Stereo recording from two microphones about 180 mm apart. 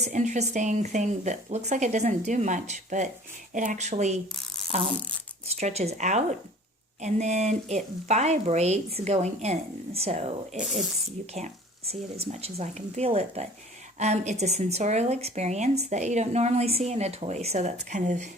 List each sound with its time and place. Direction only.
0.0 s speech: 40° right (ahead or behind)
5.5 s speech: 40° right (ahead or behind)